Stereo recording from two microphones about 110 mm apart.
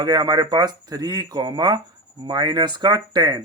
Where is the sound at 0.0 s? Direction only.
35° right (ahead or behind).